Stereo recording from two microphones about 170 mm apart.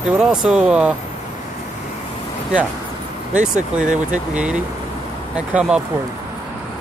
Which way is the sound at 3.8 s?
45° right (ahead or behind).